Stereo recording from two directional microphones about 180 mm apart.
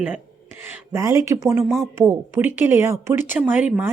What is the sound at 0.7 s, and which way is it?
Speech, 15° right (ahead or behind).